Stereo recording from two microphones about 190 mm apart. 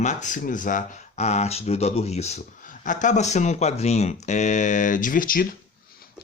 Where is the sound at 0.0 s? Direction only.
40° left (ahead or behind).